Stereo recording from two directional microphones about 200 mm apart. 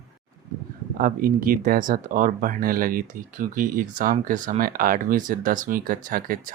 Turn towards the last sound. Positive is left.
turn(degrees=-45)  # may be behind; listen again after turning